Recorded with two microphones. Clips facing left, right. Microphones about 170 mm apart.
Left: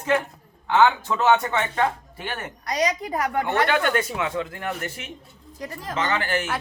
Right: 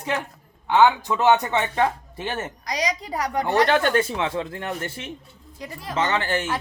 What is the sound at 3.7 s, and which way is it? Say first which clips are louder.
Speech: right 2 dB; 30° right (ahead or behind).